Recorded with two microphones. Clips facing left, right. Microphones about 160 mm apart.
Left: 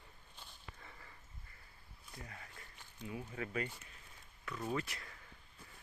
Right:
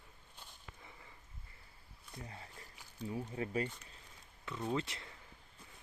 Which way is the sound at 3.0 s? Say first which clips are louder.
Right 4 dB; 35° right (ahead or behind).